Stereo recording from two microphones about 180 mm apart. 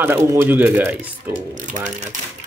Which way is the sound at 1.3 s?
45° right (ahead or behind).